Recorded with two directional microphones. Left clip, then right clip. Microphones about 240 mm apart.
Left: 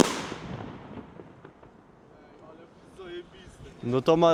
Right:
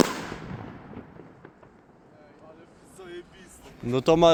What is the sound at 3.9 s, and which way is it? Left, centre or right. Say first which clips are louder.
Speech: right 2 dB; centre.